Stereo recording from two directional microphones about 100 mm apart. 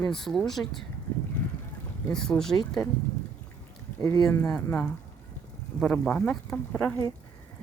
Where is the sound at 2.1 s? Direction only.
5° left (ahead or behind).